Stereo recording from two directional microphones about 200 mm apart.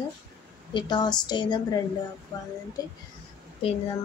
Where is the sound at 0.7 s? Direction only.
20° left (ahead or behind).